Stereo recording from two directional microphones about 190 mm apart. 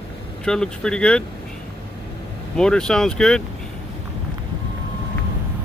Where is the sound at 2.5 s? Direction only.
5° left (ahead or behind).